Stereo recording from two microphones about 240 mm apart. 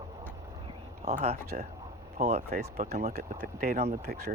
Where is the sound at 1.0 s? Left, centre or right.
Right.